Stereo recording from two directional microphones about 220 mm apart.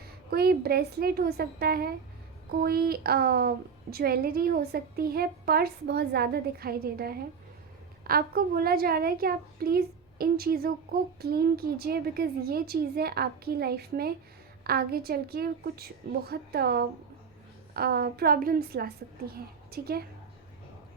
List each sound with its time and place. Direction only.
0.3 s a woman's voice: 45° right (ahead or behind)